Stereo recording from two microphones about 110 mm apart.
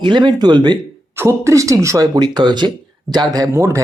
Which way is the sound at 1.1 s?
25° right (ahead or behind).